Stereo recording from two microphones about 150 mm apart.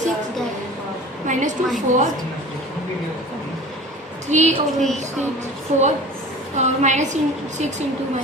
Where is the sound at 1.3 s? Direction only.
55° right (ahead or behind).